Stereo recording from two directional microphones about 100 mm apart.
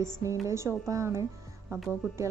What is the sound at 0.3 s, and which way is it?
Speech, 30° right (ahead or behind).